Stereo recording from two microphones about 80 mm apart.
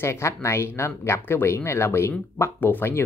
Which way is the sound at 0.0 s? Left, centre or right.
Left.